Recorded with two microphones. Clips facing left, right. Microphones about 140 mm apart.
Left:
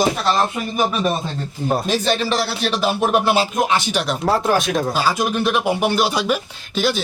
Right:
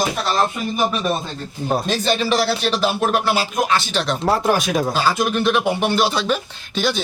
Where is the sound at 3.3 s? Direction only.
25° left (ahead or behind).